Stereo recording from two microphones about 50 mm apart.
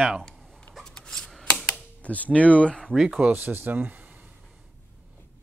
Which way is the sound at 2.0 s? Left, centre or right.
Left.